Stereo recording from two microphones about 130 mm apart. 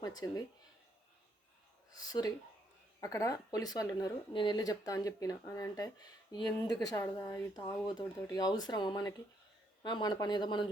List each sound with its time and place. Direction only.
0.0 s speech: 30° left (ahead or behind)
2.0 s speech: 30° left (ahead or behind)